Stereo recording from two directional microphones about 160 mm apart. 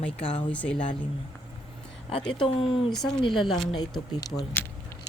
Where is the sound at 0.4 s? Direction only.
10° left (ahead or behind).